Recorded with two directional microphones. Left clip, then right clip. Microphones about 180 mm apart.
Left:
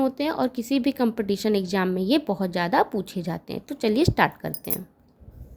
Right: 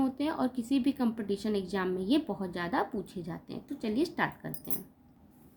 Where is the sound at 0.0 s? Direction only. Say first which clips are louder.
Left 7 dB; 45° left (ahead or behind).